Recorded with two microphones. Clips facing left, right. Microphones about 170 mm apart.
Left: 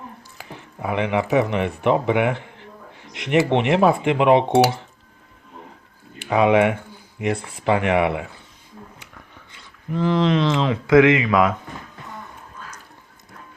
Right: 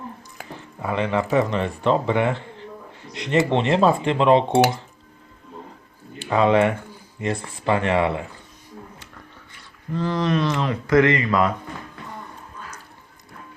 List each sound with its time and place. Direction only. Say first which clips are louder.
0.8 s speech: left 1 dB; 15° left (ahead or behind)
3.0 s a sound: even; 15° left (ahead or behind)
3.5 s speech: left 1 dB; 15° left (ahead or behind)
6.3 s speech: left 1 dB; 15° left (ahead or behind)
9.5 s speech: left 1 dB; 15° left (ahead or behind)
11.2 s speech: left 2 dB; 5° left (ahead or behind)